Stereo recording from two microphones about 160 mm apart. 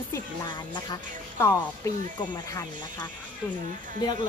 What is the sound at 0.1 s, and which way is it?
Speech, 30° left (ahead or behind).